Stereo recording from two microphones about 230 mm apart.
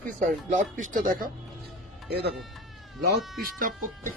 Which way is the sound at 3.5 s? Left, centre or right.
Right.